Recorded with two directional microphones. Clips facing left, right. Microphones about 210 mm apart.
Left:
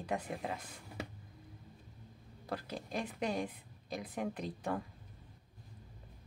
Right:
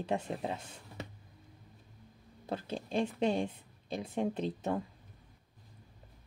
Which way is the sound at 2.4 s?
25° right (ahead or behind).